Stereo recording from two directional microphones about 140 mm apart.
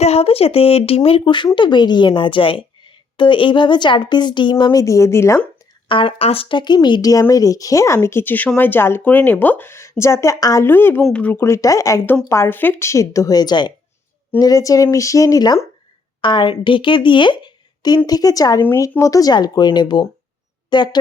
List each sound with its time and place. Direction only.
0.0 s a woman's voice: 45° left (ahead or behind); by 5.4 s 20° left (ahead or behind)
5.9 s a woman's voice: 40° left (ahead or behind)